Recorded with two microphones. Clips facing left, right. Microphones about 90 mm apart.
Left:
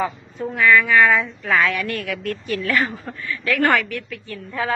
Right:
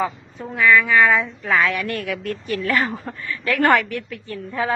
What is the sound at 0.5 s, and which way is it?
A woman's voice, 10° right (ahead or behind).